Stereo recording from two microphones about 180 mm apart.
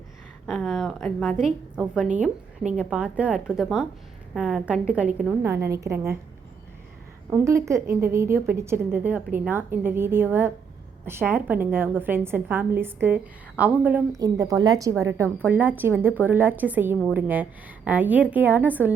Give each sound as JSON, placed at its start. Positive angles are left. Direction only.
{"t": 0.4, "sound": "a woman's voice", "side_deg": 0}
{"t": 7.3, "sound": "a woman's voice", "side_deg": -15}